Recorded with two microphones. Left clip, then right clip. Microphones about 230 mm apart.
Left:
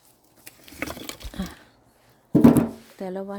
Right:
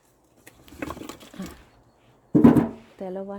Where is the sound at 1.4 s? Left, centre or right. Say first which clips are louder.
Left 3 dB; centre.